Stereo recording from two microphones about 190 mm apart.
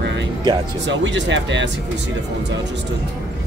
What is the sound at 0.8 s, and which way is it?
Speech, 70° right (ahead or behind).